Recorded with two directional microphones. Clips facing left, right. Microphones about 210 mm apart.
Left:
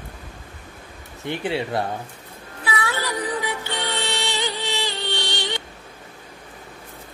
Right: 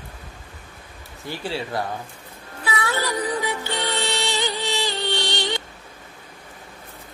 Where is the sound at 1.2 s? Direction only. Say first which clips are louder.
Left 4 dB; 20° left (ahead or behind).